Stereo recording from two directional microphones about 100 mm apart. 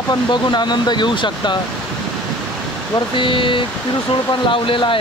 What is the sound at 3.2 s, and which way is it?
Speech, 55° left (ahead or behind).